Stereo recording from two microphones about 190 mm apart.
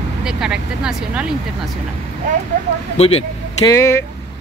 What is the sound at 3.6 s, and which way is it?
Speech, 15° left (ahead or behind).